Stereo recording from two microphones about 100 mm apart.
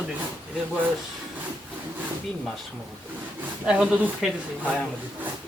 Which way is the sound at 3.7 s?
10° right (ahead or behind).